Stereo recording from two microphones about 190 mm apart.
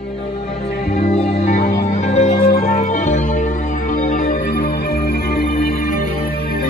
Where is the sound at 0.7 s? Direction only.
50° left (ahead or behind).